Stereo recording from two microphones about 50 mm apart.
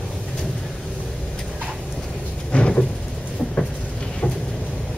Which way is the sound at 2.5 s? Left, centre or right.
Left.